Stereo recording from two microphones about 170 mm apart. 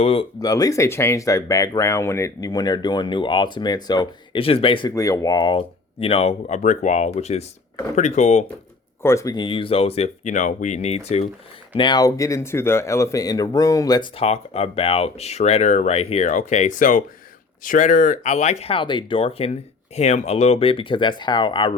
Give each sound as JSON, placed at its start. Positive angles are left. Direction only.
{"t": 0.0, "sound": "speech", "side_deg": 35}
{"t": 0.3, "sound": "speech", "side_deg": 20}
{"t": 4.9, "sound": "speech", "side_deg": 20}
{"t": 9.0, "sound": "speech", "side_deg": 20}
{"t": 11.8, "sound": "speech", "side_deg": 25}
{"t": 14.2, "sound": "speech", "side_deg": 40}